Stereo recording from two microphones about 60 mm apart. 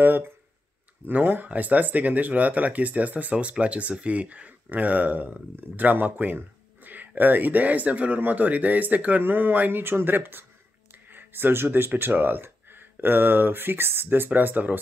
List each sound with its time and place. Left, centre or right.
0.0 s speech: right